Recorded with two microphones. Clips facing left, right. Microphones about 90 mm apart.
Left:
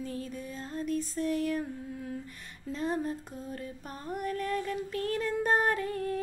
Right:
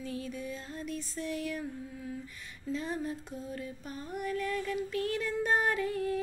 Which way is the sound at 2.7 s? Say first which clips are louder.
Left 3 dB; 45° left (ahead or behind).